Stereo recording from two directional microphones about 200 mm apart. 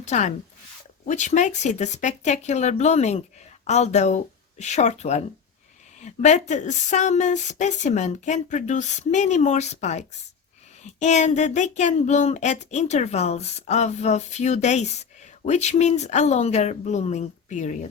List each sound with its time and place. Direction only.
0.0 s speech: 35° left (ahead or behind)
6.2 s speech: 35° left (ahead or behind)
11.0 s speech: 35° left (ahead or behind)